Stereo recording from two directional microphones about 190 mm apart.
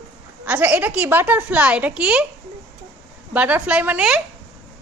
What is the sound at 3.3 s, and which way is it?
Speech, 10° right (ahead or behind).